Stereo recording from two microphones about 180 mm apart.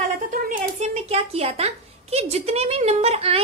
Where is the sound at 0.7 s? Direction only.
35° right (ahead or behind).